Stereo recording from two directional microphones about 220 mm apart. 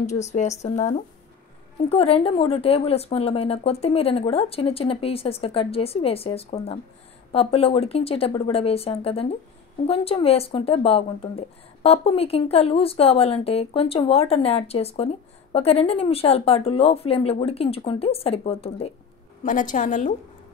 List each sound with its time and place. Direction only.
0.0 s speech: 30° left (ahead or behind)